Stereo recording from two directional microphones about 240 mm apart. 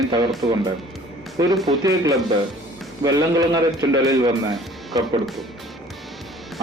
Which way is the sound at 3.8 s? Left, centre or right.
Centre.